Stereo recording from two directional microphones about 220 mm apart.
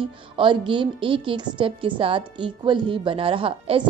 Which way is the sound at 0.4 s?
20° right (ahead or behind).